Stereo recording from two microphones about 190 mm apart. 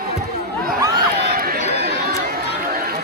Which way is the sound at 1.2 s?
50° right (ahead or behind).